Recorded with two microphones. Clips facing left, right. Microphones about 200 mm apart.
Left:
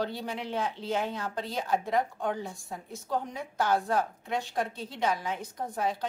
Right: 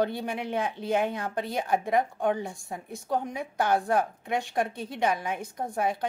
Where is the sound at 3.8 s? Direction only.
60° right (ahead or behind).